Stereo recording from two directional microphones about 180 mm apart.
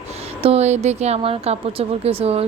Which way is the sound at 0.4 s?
35° right (ahead or behind).